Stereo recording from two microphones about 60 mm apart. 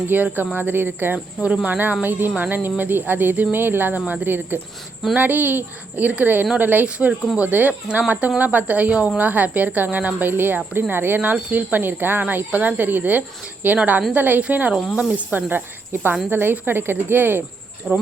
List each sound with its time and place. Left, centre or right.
0.1 s a woman's voice: right
6.8 s a woman's voice: centre; by 17.4 s right
17.9 s a woman's voice: right